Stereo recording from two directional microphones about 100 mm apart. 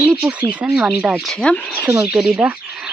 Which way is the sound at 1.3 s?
10° left (ahead or behind).